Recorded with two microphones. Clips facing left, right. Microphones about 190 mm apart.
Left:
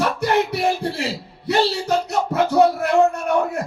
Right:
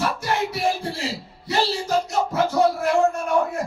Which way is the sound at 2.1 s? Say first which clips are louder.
Left 2 dB; 65° left (ahead or behind).